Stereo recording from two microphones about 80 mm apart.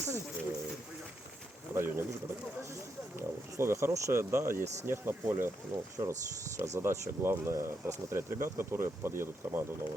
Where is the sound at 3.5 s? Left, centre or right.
Right.